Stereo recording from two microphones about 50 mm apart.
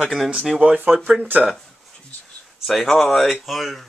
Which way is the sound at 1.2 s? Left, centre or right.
Right.